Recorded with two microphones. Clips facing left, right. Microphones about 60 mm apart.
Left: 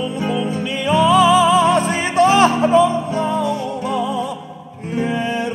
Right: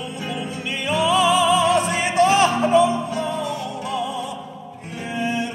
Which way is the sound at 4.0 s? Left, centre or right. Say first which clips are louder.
Left 5 dB; left.